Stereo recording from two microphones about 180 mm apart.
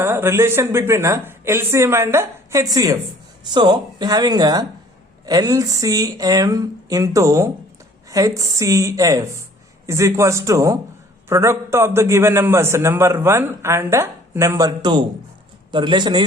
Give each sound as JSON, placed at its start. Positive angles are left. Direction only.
{"t": 0.0, "sound": "a man's voice", "side_deg": -15}